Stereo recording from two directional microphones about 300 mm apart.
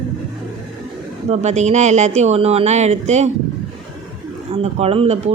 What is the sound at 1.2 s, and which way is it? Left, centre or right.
Speech, right.